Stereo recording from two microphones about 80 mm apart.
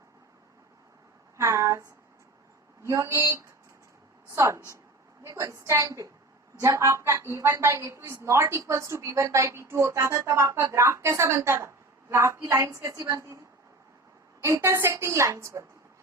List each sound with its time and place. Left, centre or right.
1.4 s a sound: right
2.8 s a woman's voice: right
14.4 s a woman's voice: right